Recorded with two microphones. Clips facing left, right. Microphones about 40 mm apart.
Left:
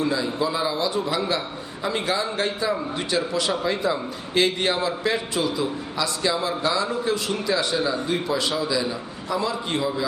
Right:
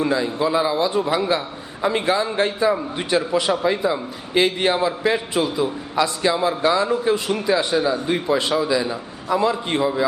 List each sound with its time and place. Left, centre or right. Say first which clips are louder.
0.0 s a man's voice: right 3 dB; right
3.5 s a man's voice: right 3 dB; centre